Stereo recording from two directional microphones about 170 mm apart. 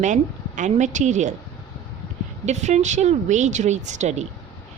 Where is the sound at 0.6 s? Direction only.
45° right (ahead or behind).